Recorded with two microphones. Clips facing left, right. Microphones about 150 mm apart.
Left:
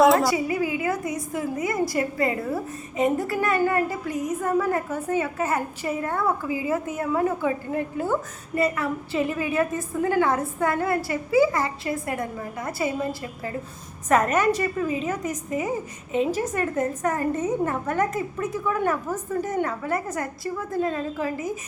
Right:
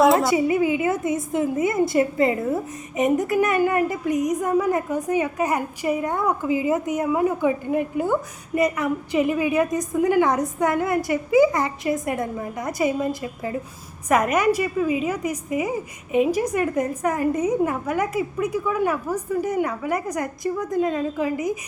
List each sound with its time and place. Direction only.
0.0 s speech: centre (ahead or behind)
0.3 s a woman's voice: 25° right (ahead or behind)